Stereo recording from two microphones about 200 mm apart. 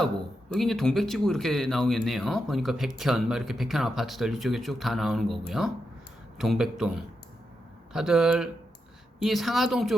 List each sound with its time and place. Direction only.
0.5 s speech: centre (ahead or behind)